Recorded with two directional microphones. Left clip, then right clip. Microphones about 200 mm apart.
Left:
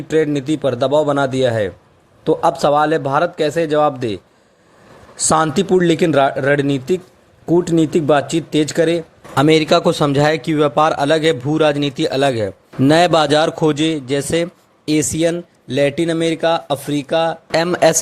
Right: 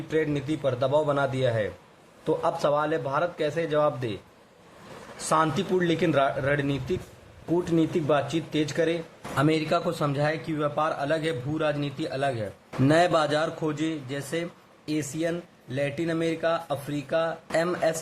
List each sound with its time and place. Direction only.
0.3 s speech: 35° left (ahead or behind)
5.3 s speech: 35° left (ahead or behind)